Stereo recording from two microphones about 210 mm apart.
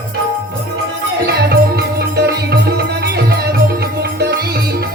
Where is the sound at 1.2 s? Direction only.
50° right (ahead or behind).